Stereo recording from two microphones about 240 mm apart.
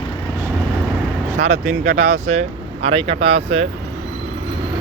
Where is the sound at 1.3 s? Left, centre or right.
Right.